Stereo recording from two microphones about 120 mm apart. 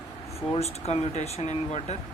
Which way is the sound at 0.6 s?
60° left (ahead or behind).